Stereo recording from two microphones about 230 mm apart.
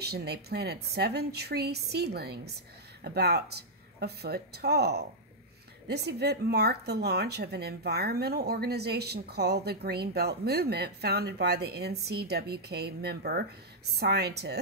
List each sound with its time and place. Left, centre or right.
0.0 s speech: right